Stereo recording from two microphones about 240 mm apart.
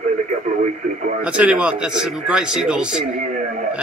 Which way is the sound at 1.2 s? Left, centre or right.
Centre.